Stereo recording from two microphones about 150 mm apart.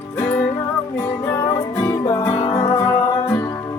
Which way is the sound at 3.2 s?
15° left (ahead or behind).